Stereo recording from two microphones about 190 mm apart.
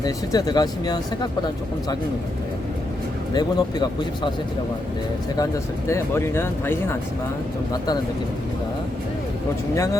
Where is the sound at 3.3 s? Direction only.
20° left (ahead or behind).